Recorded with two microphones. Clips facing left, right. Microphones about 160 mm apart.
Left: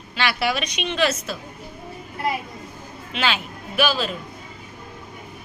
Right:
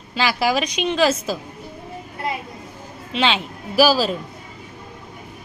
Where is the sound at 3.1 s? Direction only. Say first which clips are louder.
Right 4 dB; 30° right (ahead or behind).